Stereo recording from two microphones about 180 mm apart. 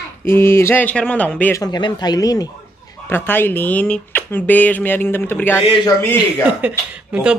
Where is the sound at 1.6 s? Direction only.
25° left (ahead or behind).